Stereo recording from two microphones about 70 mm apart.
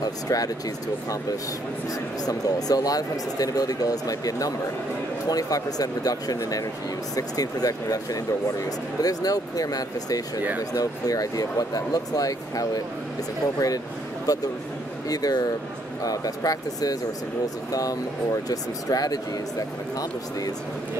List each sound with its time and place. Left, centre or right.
0.0 s speech: left
2.2 s speech: left
15.0 s speech: left